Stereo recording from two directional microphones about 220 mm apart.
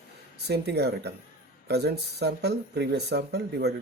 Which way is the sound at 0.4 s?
50° right (ahead or behind).